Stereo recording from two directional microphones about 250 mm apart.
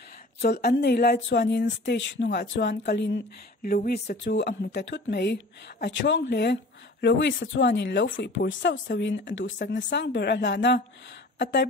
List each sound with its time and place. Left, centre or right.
0.4 s speech: left